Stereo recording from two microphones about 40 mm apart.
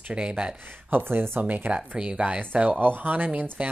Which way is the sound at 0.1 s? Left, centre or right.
Right.